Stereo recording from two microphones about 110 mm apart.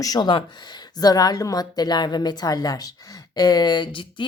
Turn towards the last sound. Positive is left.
turn(degrees=50)  # may be behind; listen again after turning